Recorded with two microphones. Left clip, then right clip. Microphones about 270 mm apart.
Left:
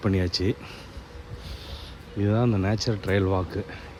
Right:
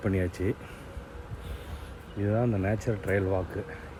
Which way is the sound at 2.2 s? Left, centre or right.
Centre.